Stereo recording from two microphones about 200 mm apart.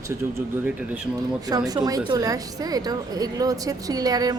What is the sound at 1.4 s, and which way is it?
A woman's voice, 20° right (ahead or behind).